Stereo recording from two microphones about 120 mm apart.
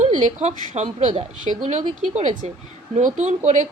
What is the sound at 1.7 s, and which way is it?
A woman's voice, 80° right.